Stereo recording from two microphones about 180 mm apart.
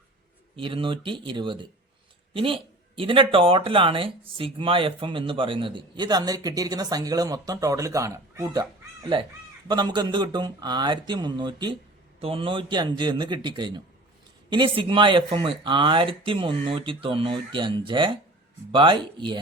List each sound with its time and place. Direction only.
0.5 s speech: 30° right (ahead or behind)